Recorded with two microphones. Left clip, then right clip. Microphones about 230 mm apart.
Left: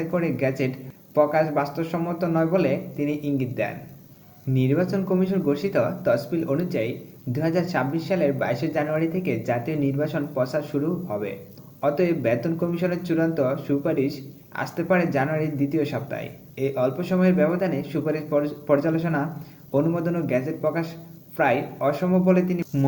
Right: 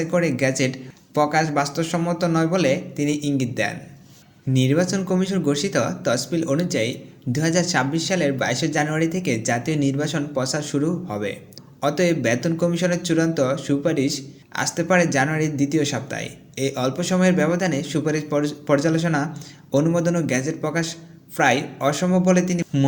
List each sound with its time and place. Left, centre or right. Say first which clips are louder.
0.1 s a man's voice: right 4 dB; right